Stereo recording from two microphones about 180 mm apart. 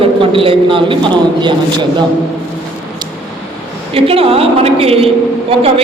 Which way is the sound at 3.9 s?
30° right (ahead or behind).